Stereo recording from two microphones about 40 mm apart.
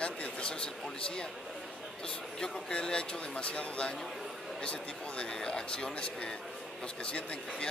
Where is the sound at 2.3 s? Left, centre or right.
Centre.